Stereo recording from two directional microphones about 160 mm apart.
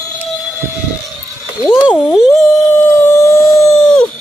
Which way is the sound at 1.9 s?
15° left (ahead or behind).